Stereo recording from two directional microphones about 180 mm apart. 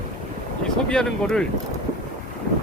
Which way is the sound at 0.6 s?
5° left (ahead or behind).